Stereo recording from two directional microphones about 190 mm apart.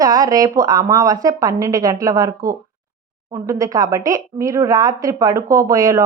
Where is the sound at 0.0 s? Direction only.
20° right (ahead or behind).